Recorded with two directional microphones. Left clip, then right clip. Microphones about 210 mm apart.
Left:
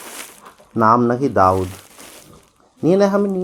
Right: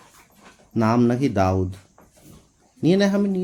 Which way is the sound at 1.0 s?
45° right (ahead or behind).